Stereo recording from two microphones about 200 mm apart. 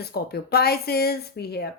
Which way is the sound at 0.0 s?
50° left (ahead or behind).